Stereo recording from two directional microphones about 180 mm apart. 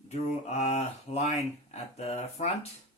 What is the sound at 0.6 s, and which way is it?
Speech, 35° left (ahead or behind).